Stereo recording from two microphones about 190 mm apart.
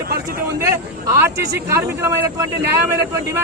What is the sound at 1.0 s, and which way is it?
Speech, 15° right (ahead or behind).